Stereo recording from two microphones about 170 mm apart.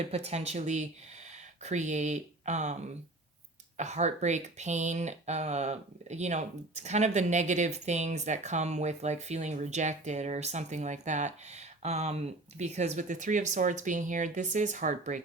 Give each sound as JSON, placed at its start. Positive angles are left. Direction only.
{"t": 0.1, "sound": "speech", "side_deg": -35}
{"t": 3.8, "sound": "speech", "side_deg": -40}